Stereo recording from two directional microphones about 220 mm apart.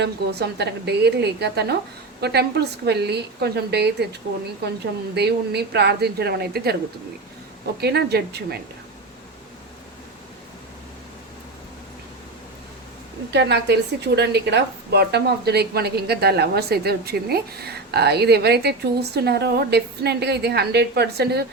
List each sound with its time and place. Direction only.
0.0 s a woman's voice: 50° right (ahead or behind)
7.8 s a woman's voice: 45° right (ahead or behind)
13.3 s a woman's voice: 50° right (ahead or behind)